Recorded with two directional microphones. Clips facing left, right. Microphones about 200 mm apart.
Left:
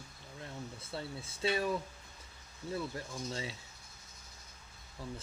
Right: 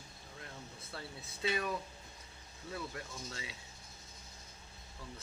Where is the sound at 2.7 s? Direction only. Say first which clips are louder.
Left 4 dB; 30° left (ahead or behind).